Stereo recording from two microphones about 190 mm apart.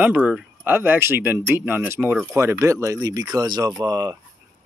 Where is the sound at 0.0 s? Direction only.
5° right (ahead or behind).